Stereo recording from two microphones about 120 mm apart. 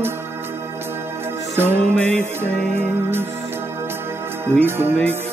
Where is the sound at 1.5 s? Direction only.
20° right (ahead or behind).